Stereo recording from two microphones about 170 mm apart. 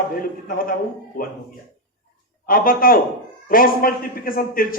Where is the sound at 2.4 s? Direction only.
55° left (ahead or behind).